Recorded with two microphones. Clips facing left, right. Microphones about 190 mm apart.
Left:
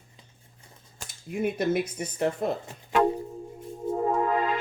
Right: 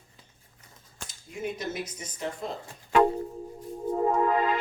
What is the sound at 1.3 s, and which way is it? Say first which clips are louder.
Speech: left 7 dB; 55° left (ahead or behind).